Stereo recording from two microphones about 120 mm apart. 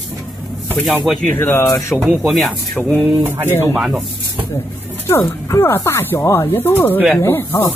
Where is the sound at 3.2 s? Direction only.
20° right (ahead or behind).